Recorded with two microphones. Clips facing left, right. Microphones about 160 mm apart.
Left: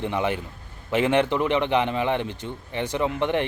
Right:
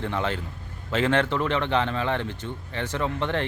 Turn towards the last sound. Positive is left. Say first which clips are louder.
# left 3 dB
turn(degrees=15)  # may be behind; listen again after turning